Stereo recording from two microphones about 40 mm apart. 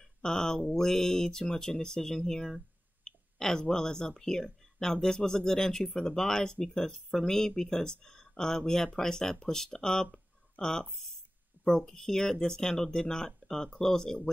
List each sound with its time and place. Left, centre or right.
0.2 s speech: centre